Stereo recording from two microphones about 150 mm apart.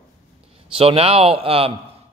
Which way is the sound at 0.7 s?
40° right (ahead or behind).